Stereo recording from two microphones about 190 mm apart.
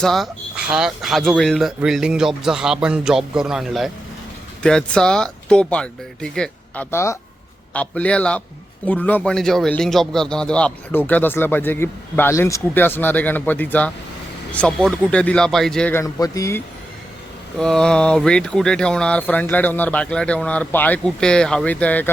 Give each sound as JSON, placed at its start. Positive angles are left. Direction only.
{"t": 0.0, "sound": "a man's voice", "side_deg": 0}
{"t": 17.6, "sound": "speech", "side_deg": 5}